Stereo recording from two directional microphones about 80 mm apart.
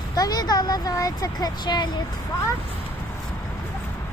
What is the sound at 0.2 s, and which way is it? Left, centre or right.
Speech, left.